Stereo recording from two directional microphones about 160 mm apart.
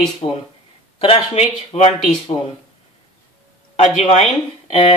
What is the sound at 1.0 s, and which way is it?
Speech, 40° left (ahead or behind).